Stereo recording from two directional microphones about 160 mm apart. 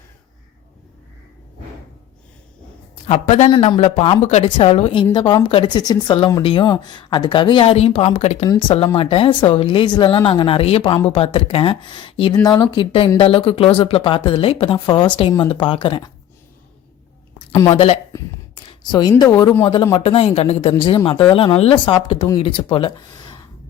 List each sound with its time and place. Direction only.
3.1 s speech: 40° left (ahead or behind)
8.4 s speech: 30° left (ahead or behind)
17.7 s speech: 40° left (ahead or behind)
18.1 s a sound: 25° left (ahead or behind)
19.2 s speech: 25° left (ahead or behind)